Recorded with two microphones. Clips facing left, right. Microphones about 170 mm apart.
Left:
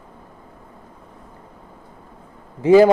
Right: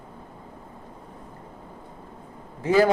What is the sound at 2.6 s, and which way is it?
Speech, 15° left (ahead or behind).